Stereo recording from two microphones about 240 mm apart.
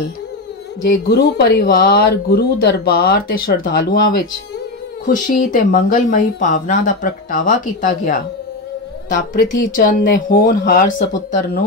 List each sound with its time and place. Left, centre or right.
1.0 s speech: left